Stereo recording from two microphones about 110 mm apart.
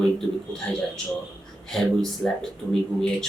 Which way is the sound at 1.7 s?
5° left (ahead or behind).